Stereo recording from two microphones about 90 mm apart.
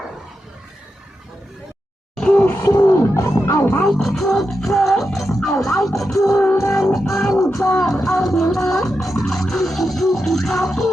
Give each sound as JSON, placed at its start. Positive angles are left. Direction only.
{"t": 2.1, "sound": "a sound", "side_deg": 10}
{"t": 2.6, "sound": "music", "side_deg": 40}
{"t": 3.8, "sound": "music", "side_deg": 5}
{"t": 6.1, "sound": "music", "side_deg": 35}
{"t": 6.7, "sound": "music", "side_deg": 0}
{"t": 7.5, "sound": "music", "side_deg": 35}
{"t": 7.8, "sound": "music", "side_deg": 5}